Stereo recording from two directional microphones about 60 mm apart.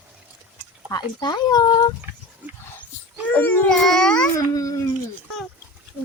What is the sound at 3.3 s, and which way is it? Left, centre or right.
Speech, left.